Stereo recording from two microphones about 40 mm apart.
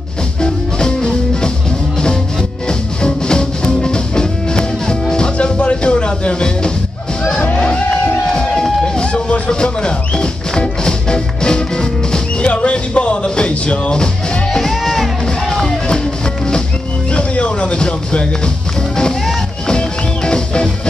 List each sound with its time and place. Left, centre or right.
0.4 s music: left
3.0 s music: left
14.5 s music: centre
15.4 s music: centre
17.1 s music: left
20.2 s music: left